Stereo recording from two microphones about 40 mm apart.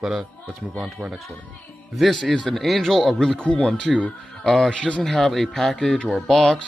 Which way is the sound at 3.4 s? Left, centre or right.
Left.